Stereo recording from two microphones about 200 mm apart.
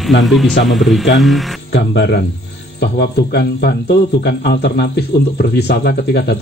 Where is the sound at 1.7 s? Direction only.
60° left (ahead or behind).